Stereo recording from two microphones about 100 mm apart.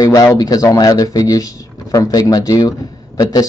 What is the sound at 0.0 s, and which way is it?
A man's voice, 35° left (ahead or behind).